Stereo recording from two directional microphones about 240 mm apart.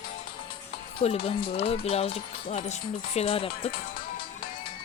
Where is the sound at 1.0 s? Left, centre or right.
Left.